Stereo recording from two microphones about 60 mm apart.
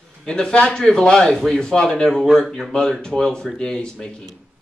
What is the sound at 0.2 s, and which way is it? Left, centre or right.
Speech, centre.